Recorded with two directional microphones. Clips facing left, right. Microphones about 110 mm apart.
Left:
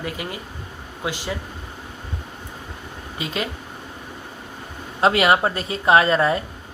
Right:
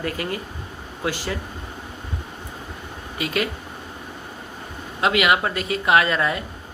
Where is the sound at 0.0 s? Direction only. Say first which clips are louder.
Right 3 dB; 15° left (ahead or behind).